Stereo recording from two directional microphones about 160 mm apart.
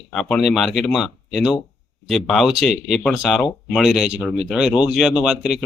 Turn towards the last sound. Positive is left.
turn(degrees=-5)  # may be behind; listen again after turning